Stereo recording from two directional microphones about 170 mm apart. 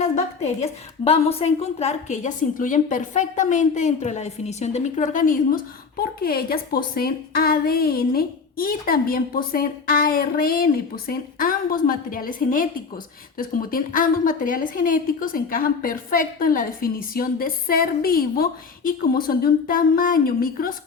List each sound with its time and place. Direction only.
0.0 s a woman's voice: 40° left (ahead or behind); by 20.7 s 55° left (ahead or behind)